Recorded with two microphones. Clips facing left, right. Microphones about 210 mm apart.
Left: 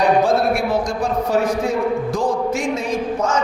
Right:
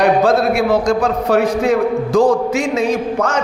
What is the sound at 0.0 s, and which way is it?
A man's voice, 70° right (ahead or behind).